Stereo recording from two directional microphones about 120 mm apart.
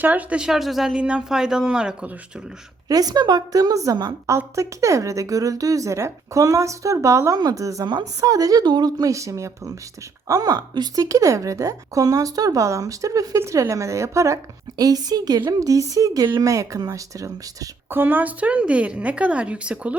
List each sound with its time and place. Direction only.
0.0 s speech: 15° right (ahead or behind)
2.9 s a woman's voice: 35° right (ahead or behind)
17.9 s a woman's voice: 15° right (ahead or behind)